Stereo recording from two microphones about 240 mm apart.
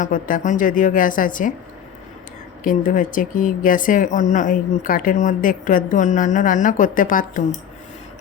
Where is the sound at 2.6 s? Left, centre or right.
Left.